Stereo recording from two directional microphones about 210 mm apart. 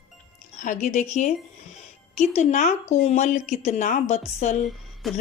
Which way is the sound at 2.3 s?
35° left (ahead or behind).